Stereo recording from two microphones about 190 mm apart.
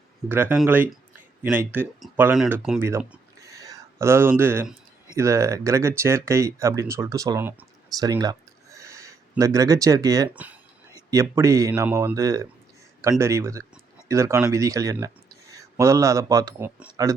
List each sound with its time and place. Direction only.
0.3 s speech: 10° right (ahead or behind)
3.4 s a sound: 20° right (ahead or behind)
5.1 s speech: 15° right (ahead or behind)